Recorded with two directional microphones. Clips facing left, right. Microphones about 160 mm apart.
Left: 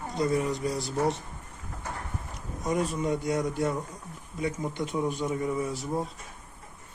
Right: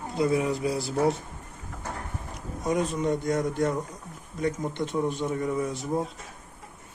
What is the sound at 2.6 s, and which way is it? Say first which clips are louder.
Speech: right 2 dB; 5° left (ahead or behind).